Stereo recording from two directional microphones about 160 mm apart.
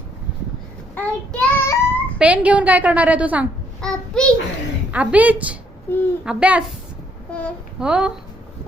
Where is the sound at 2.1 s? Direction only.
10° right (ahead or behind).